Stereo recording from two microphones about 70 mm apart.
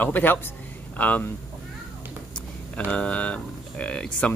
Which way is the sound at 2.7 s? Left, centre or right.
Centre.